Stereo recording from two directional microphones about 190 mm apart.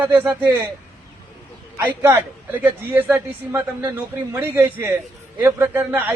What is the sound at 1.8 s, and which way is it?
A man's voice, 10° right (ahead or behind).